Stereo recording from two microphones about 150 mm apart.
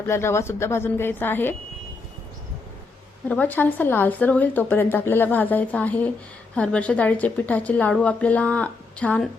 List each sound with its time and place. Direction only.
0.0 s a woman's voice: 15° left (ahead or behind)
3.2 s a woman's voice: 10° left (ahead or behind)